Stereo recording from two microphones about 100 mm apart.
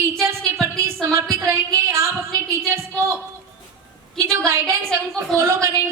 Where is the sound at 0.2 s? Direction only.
25° right (ahead or behind).